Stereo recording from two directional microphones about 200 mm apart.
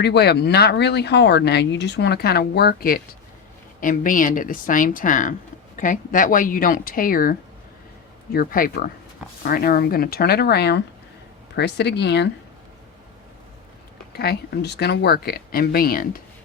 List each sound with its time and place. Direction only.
0.0 s speech: 55° left (ahead or behind)
14.1 s speech: 55° left (ahead or behind)